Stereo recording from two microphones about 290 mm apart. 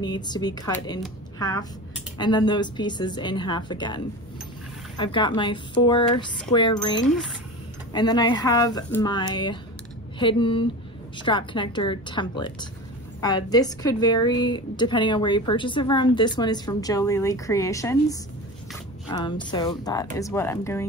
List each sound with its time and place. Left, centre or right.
0.0 s a woman's voice: centre